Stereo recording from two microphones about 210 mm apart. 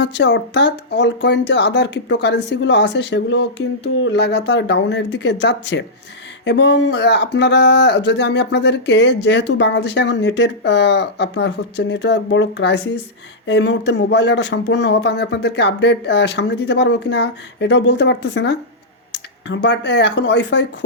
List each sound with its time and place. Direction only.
0.0 s speech: 55° left (ahead or behind)